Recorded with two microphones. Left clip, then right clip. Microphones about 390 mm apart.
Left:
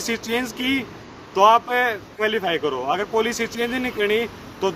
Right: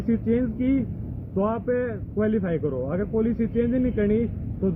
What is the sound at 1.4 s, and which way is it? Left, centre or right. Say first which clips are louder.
Speech: left 10 dB; left.